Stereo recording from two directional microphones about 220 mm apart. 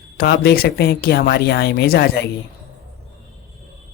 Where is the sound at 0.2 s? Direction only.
45° left (ahead or behind).